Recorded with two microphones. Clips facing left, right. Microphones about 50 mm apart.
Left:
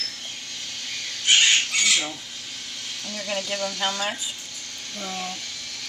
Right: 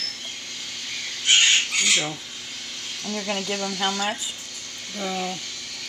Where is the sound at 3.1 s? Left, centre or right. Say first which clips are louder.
Right 2 dB; centre.